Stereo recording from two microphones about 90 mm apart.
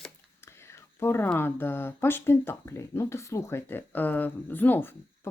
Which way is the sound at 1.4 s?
25° left (ahead or behind).